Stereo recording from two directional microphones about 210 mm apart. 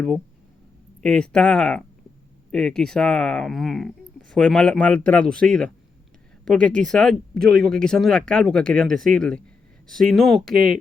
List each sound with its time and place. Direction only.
1.0 s speech: 5° left (ahead or behind)
10.5 s speech: 45° right (ahead or behind)